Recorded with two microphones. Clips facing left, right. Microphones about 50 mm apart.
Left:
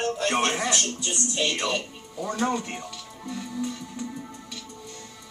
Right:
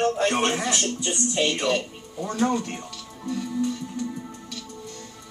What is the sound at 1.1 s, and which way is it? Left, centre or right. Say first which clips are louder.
Speech: right 3 dB; centre.